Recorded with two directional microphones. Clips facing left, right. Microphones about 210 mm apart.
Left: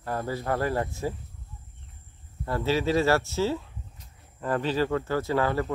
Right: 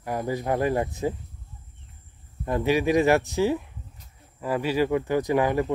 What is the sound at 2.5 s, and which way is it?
Speech, 15° right (ahead or behind).